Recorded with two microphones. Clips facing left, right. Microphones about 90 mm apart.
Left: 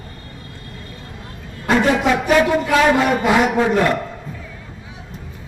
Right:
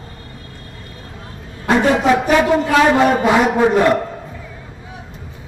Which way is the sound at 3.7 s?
15° right (ahead or behind).